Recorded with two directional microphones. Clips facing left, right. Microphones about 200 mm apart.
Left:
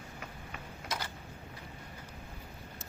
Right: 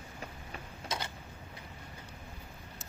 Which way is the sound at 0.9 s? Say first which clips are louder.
Right 1 dB; 25° right (ahead or behind).